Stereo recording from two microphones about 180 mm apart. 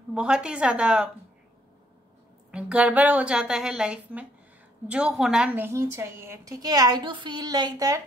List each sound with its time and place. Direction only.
0.1 s a woman's voice: 5° right (ahead or behind)
2.5 s a woman's voice: 5° right (ahead or behind)